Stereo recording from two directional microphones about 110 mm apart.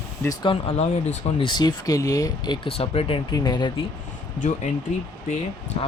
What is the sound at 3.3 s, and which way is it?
Speech, 40° left (ahead or behind).